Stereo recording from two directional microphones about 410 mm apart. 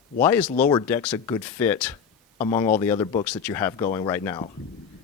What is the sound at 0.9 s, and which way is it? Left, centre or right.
A woman's voice, centre.